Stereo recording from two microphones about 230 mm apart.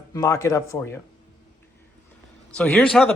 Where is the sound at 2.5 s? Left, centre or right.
Centre.